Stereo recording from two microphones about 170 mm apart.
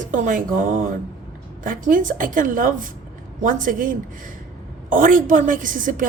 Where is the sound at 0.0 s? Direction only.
50° right (ahead or behind).